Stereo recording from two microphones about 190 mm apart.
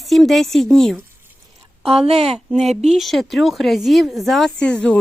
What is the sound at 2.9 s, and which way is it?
Speech, centre (ahead or behind).